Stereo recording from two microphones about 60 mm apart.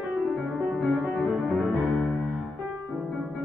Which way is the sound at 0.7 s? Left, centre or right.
Centre.